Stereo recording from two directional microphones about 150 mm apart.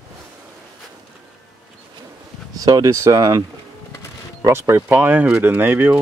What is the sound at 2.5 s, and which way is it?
Speech, 25° right (ahead or behind).